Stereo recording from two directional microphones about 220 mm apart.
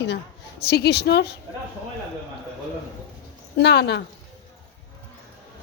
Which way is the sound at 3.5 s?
50° left (ahead or behind).